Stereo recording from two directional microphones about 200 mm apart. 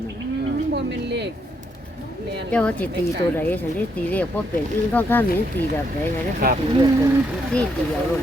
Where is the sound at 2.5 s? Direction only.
5° left (ahead or behind).